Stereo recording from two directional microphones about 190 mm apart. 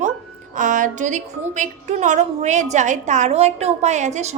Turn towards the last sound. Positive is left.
turn(degrees=-35)  # may be behind; listen again after turning